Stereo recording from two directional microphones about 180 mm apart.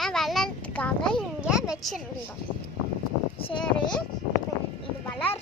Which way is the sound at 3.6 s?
5° left (ahead or behind).